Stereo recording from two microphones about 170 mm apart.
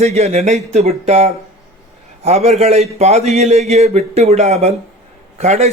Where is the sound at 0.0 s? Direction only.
40° right (ahead or behind).